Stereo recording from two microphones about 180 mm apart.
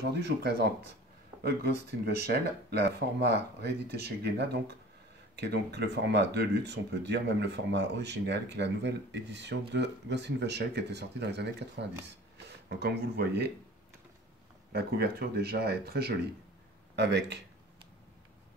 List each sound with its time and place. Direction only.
0.0 s speech: 65° right (ahead or behind)
14.7 s speech: 60° right (ahead or behind)